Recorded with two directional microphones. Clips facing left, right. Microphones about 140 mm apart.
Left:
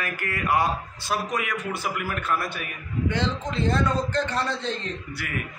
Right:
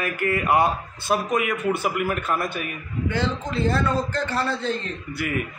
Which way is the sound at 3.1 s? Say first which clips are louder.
Right 2 dB; 20° left (ahead or behind).